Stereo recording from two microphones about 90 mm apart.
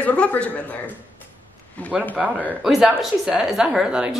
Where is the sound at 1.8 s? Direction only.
15° left (ahead or behind).